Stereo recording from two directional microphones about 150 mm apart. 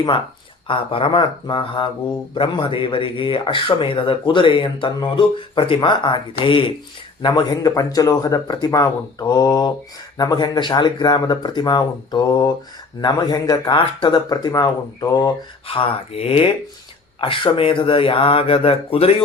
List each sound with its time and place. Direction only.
0.7 s a man's voice: 35° left (ahead or behind)
15.6 s speech: 35° left (ahead or behind)